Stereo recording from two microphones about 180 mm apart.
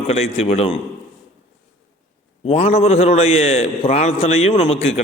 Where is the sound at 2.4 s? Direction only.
35° left (ahead or behind).